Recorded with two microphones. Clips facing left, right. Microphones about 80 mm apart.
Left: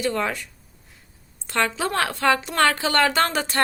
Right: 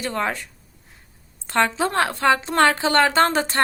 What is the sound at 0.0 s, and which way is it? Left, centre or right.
Speech, right.